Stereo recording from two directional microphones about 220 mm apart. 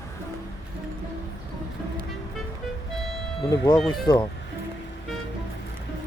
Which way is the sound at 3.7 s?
Centre (ahead or behind).